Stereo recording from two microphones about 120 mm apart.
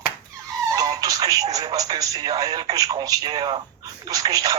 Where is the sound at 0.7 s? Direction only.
30° right (ahead or behind).